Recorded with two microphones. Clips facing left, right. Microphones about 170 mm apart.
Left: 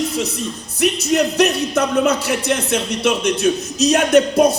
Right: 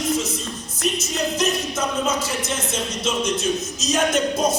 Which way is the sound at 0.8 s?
65° left (ahead or behind).